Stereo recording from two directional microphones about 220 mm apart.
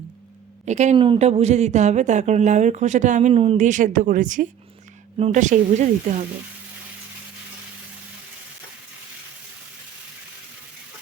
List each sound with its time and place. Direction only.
0.6 s speech: 30° right (ahead or behind)